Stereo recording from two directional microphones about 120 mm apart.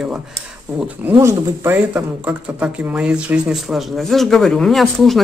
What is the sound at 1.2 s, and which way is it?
Speech, 25° right (ahead or behind).